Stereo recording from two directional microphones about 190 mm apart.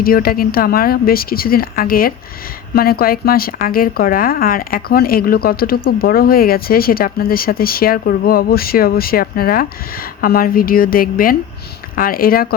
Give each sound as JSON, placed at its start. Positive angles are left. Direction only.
{"t": 0.0, "sound": "speech", "side_deg": 50}